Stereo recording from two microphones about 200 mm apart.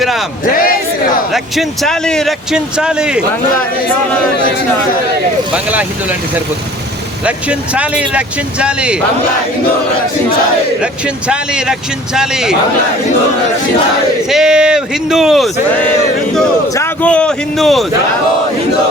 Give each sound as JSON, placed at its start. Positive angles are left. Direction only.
{"t": 0.5, "sound": "a sound", "side_deg": 45}
{"t": 1.3, "sound": "speech", "side_deg": 0}
{"t": 5.6, "sound": "speech", "side_deg": -5}
{"t": 7.3, "sound": "speech", "side_deg": -5}
{"t": 10.8, "sound": "speech", "side_deg": -5}
{"t": 14.3, "sound": "speech", "side_deg": -5}
{"t": 16.7, "sound": "a man's voice", "side_deg": 10}